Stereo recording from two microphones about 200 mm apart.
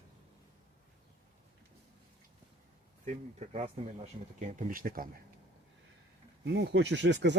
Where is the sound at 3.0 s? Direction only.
35° right (ahead or behind).